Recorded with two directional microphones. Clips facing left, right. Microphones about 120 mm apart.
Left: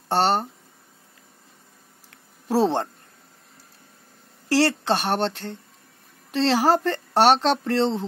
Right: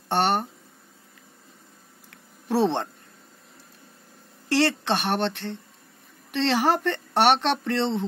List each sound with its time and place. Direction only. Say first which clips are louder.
0.1 s speech: left 2 dB; 30° left (ahead or behind)
2.4 s speech: left 2 dB; 30° left (ahead or behind)
4.5 s speech: left 2 dB; 35° left (ahead or behind)